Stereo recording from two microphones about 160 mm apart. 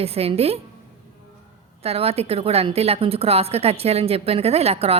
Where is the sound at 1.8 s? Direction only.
40° right (ahead or behind).